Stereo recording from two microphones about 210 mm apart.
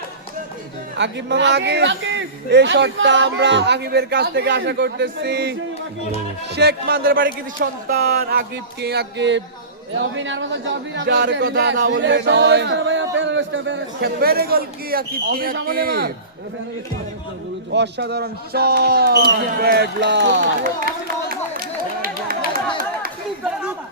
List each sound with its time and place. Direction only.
0.9 s speech: 55° right (ahead or behind)
17.7 s speech: 55° right (ahead or behind)